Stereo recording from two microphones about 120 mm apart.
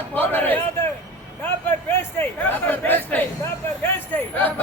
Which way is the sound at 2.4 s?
15° left (ahead or behind).